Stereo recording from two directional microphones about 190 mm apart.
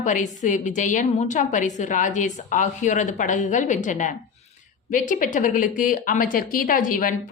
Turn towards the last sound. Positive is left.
turn(degrees=45)  # may be behind; listen again after turning